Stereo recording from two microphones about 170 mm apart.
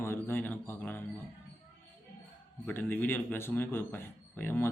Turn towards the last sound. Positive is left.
turn(degrees=10)  # may be behind; listen again after turning